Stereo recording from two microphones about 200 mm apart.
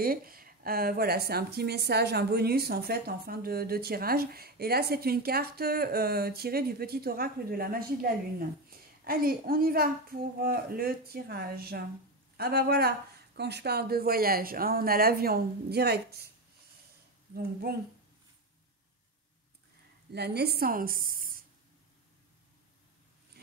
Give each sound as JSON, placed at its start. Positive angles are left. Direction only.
{"t": 0.0, "sound": "speech", "side_deg": -45}
{"t": 17.3, "sound": "speech", "side_deg": -45}
{"t": 20.1, "sound": "a woman's voice", "side_deg": -55}